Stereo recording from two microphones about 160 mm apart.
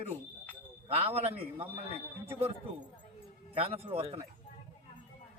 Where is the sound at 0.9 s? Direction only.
35° right (ahead or behind).